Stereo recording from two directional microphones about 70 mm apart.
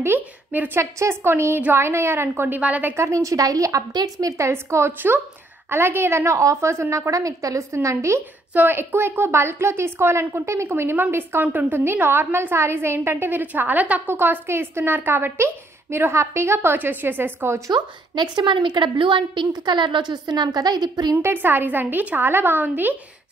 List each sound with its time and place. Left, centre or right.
0.0 s a sound: right
0.7 s a woman's voice: right
2.9 s a woman's voice: right
4.3 s a woman's voice: right
8.5 s a woman's voice: right
17.6 s a woman's voice: right
21.2 s a woman's voice: right